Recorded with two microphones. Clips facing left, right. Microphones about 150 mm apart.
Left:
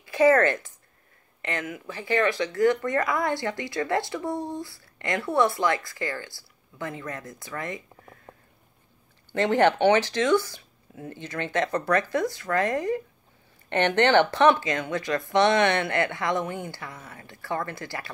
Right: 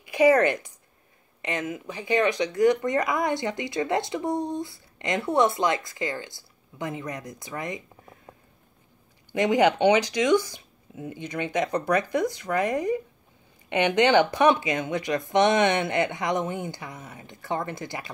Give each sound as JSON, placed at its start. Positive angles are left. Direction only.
{"t": 0.0, "sound": "speech", "side_deg": -15}
{"t": 9.3, "sound": "speech", "side_deg": -15}